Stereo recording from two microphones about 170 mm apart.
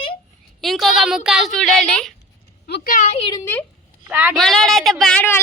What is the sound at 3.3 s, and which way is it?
Speech, 15° left (ahead or behind).